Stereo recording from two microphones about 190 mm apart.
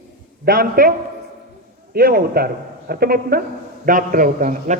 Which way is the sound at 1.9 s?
50° right (ahead or behind).